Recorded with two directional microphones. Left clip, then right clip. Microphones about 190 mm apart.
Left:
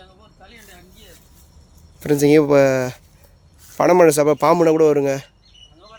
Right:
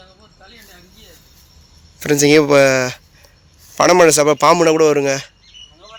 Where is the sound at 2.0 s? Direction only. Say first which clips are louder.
Right 2 dB; 5° left (ahead or behind).